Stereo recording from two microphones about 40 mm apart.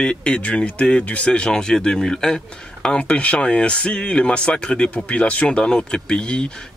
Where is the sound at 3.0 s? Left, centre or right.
Left.